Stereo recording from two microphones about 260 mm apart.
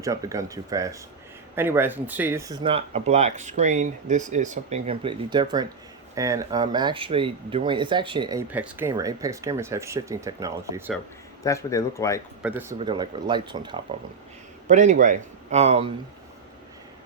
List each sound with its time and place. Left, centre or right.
0.0 s speech: centre
11.4 s speech: centre
12.4 s speech: centre
12.8 s speech: centre
14.7 s speech: right